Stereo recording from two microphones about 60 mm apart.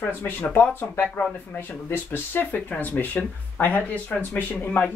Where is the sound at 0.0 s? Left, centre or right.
Left.